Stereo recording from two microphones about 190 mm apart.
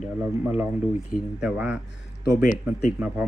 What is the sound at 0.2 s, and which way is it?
Speech, 10° right (ahead or behind).